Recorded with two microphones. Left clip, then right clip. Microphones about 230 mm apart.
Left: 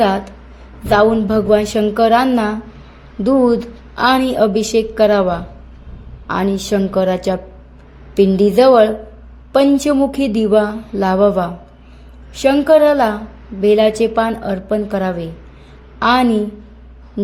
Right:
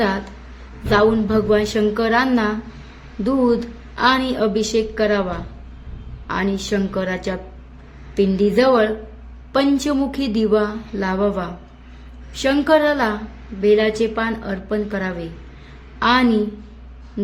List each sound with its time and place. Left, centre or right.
0.9 s a woman's voice: centre